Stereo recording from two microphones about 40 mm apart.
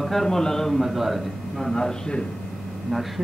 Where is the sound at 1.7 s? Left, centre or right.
Centre.